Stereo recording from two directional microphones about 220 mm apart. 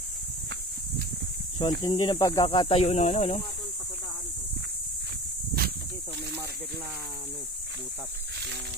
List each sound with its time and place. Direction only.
1.6 s speech: 20° left (ahead or behind)